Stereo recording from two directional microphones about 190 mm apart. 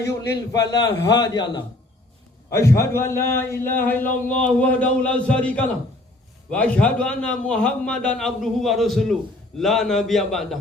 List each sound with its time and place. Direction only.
0.5 s a man's voice: 20° left (ahead or behind); by 10.6 s centre (ahead or behind)